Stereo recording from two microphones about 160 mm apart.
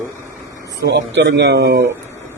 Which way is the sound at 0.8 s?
90° right.